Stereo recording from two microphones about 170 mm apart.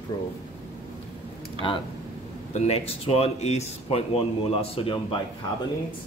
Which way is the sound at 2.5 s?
40° left (ahead or behind).